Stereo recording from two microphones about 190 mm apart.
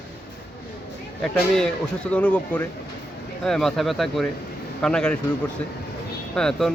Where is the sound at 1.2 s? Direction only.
Centre (ahead or behind).